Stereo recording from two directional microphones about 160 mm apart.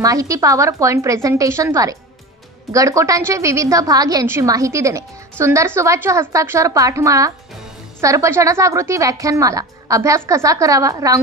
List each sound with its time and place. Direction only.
0.0 s a woman's voice: 20° right (ahead or behind)